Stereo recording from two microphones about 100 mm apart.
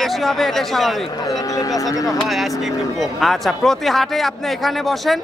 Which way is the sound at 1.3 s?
35° left (ahead or behind).